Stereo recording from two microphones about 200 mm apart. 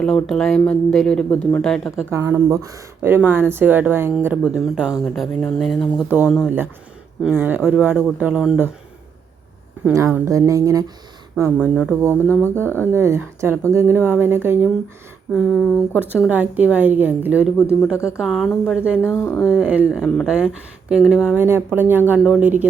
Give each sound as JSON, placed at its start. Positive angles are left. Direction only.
{"t": 0.0, "sound": "speech", "side_deg": 5}
{"t": 2.0, "sound": "speech", "side_deg": -15}
{"t": 7.3, "sound": "speech", "side_deg": -10}
{"t": 9.8, "sound": "speech", "side_deg": -15}
{"t": 12.6, "sound": "speech", "side_deg": 10}
{"t": 12.9, "sound": "speech", "side_deg": -15}
{"t": 15.3, "sound": "speech", "side_deg": 0}
{"t": 16.0, "sound": "speech", "side_deg": -5}
{"t": 19.1, "sound": "speech", "side_deg": 15}
{"t": 19.5, "sound": "speech", "side_deg": -5}